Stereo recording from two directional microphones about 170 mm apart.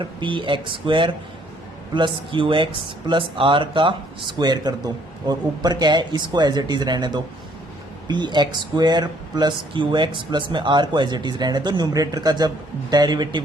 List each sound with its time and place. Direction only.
0.0 s speech: 30° right (ahead or behind)